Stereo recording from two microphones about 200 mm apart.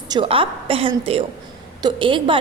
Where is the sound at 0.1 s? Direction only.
25° right (ahead or behind).